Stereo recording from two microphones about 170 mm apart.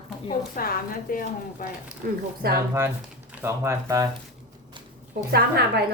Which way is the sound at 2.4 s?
65° right (ahead or behind).